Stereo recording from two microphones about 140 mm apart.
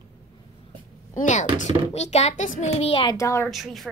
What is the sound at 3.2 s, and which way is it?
Speech, 20° left (ahead or behind).